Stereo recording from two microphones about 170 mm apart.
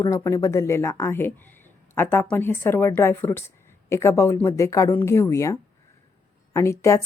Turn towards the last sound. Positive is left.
turn(degrees=15)  # may be behind; listen again after turning